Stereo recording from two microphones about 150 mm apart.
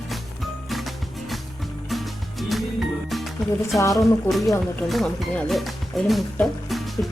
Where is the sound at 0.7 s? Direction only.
Centre (ahead or behind).